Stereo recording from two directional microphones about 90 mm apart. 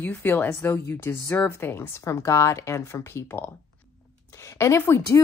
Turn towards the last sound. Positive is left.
turn(degrees=30)  # may be behind; listen again after turning